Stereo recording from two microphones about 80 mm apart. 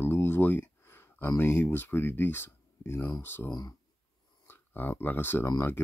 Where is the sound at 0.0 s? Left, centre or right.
Left.